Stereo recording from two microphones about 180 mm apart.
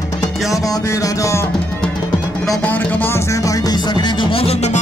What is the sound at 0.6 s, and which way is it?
Music, 20° left (ahead or behind).